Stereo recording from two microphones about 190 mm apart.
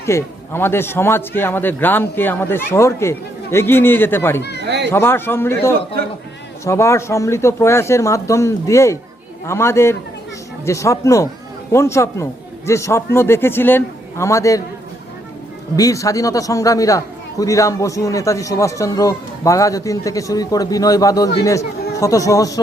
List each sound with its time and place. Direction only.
0.0 s a man's voice: 15° left (ahead or behind)
4.6 s a sound: 65° right (ahead or behind)
4.9 s a man's voice: 10° left (ahead or behind)
15.7 s a man's voice: 15° left (ahead or behind)